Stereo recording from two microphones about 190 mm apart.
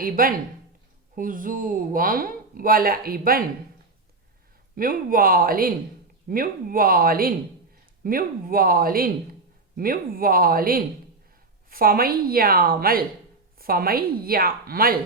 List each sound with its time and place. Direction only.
0.0 s speech: 50° right (ahead or behind)
4.7 s speech: 50° right (ahead or behind)